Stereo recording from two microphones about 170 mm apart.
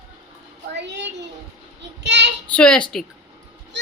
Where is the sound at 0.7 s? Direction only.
90° right.